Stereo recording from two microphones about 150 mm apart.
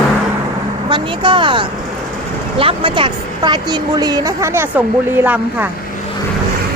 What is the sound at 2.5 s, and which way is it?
Speech, 35° right (ahead or behind).